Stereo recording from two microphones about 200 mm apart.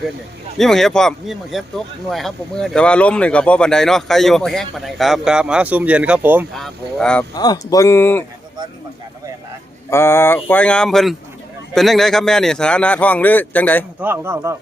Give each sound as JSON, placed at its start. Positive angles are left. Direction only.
{"t": 0.6, "sound": "speech", "side_deg": 0}
{"t": 6.5, "sound": "speech", "side_deg": 0}
{"t": 7.3, "sound": "speech", "side_deg": 20}
{"t": 9.9, "sound": "speech", "side_deg": 15}
{"t": 14.0, "sound": "a man's voice", "side_deg": -10}